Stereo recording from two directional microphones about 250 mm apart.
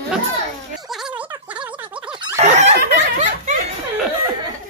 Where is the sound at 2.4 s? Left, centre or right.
Right.